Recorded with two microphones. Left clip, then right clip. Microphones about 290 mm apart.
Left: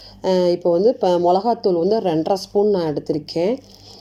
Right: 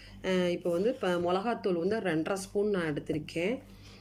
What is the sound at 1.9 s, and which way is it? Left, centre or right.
A woman's voice, centre.